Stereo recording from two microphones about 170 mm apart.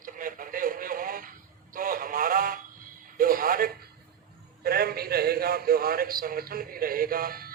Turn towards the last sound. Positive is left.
turn(degrees=-60)  # may be behind; listen again after turning